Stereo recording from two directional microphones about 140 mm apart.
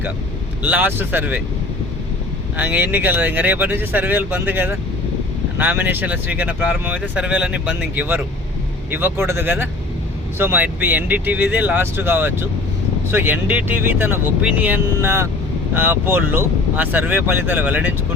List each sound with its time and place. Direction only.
0.6 s speech: 15° right (ahead or behind)
2.6 s speech: 10° right (ahead or behind)